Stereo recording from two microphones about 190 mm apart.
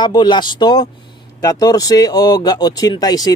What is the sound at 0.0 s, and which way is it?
A man's voice, 25° left (ahead or behind).